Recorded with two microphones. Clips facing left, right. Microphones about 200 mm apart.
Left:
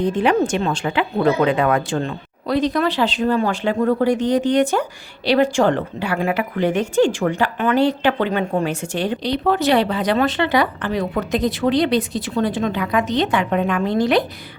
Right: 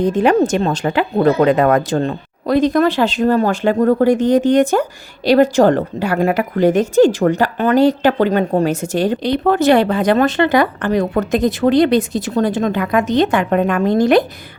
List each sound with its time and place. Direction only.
0.0 s speech: 40° right (ahead or behind)